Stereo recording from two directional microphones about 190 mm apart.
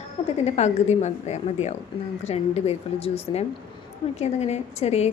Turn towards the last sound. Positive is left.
turn(degrees=35)  # may be behind; listen again after turning